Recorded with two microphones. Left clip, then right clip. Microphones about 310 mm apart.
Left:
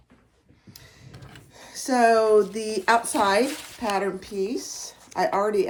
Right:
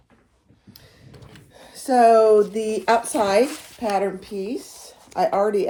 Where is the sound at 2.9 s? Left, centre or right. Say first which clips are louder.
Right 1 dB; centre.